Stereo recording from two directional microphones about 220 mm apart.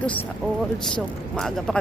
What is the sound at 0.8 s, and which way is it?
Speech, 5° left (ahead or behind).